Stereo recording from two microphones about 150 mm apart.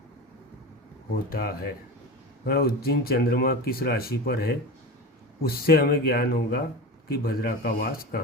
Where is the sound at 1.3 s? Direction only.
80° left.